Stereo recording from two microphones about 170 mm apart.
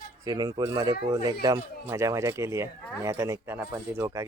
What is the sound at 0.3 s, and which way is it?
Speech, 25° right (ahead or behind).